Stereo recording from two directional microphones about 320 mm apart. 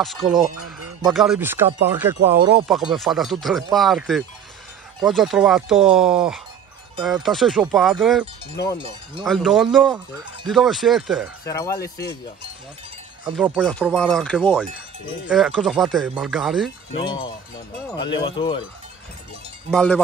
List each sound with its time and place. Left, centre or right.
0.0 s speech: centre
9.8 s cowbell: centre
10.4 s speech: centre
11.4 s speech: centre
13.3 s speech: centre
16.9 s speech: centre
19.7 s speech: centre